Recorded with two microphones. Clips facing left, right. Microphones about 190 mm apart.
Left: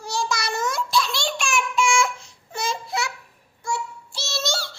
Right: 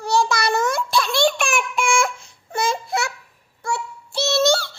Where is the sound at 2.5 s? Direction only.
55° right (ahead or behind).